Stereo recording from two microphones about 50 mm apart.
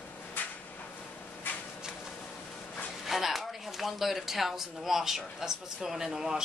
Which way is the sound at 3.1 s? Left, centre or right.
Centre.